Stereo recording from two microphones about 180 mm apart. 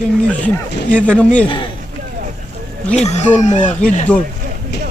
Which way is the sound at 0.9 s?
5° left (ahead or behind).